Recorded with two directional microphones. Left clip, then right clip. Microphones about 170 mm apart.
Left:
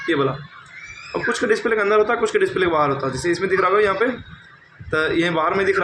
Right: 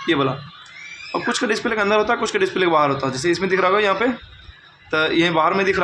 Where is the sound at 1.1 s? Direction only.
30° right (ahead or behind).